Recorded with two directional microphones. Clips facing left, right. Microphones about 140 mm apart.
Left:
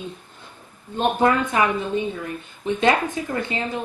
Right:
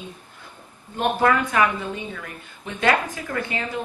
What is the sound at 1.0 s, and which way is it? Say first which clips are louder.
A woman's voice: left 1 dB; 20° left (ahead or behind).